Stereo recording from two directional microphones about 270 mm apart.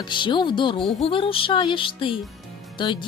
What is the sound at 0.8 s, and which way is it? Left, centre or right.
Speech, centre.